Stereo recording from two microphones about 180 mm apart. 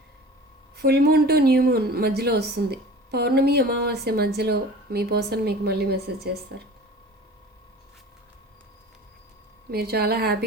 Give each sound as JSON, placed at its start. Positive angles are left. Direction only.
{"t": 0.8, "sound": "speech", "side_deg": -60}
{"t": 9.7, "sound": "speech", "side_deg": -60}